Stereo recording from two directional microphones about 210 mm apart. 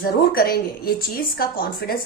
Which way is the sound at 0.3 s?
45° left (ahead or behind).